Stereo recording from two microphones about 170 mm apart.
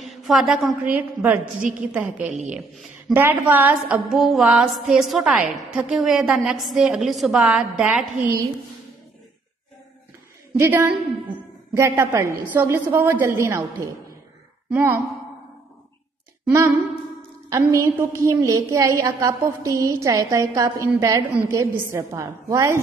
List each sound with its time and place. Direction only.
0.0 s a woman's voice: centre (ahead or behind)
1.4 s a woman's voice: 50° right (ahead or behind)
2.0 s a woman's voice: 10° right (ahead or behind)
10.6 s a woman's voice: 15° right (ahead or behind)
16.4 s a woman's voice: 10° right (ahead or behind)